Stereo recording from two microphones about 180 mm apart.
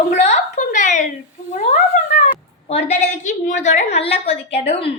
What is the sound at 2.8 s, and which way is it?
A woman's voice, 45° left (ahead or behind).